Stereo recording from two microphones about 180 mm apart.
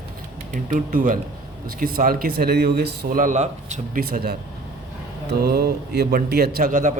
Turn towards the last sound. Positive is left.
turn(degrees=-45)  # may be behind; listen again after turning